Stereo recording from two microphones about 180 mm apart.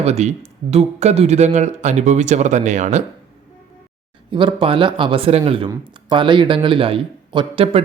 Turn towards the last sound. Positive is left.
turn(degrees=-30)  # may be behind; listen again after turning